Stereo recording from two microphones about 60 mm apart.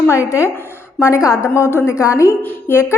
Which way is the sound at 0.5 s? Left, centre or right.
Left.